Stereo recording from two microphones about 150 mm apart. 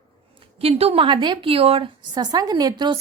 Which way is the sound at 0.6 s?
40° right (ahead or behind).